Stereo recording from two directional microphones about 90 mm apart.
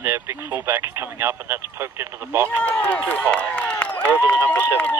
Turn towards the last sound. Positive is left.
turn(degrees=15)  # may be behind; listen again after turning